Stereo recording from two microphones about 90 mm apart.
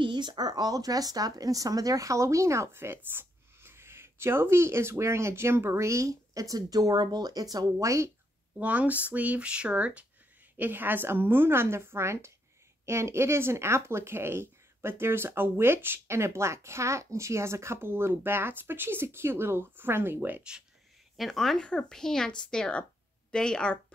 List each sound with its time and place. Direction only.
0.0 s speech: 55° right (ahead or behind); by 8.1 s 35° right (ahead or behind)
8.5 s speech: 15° right (ahead or behind)
21.2 s speech: 5° left (ahead or behind)